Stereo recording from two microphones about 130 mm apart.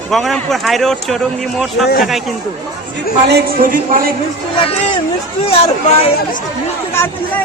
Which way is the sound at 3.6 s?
90° right.